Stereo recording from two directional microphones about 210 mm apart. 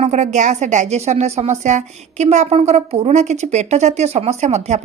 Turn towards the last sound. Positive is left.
turn(degrees=-35)  # may be behind; listen again after turning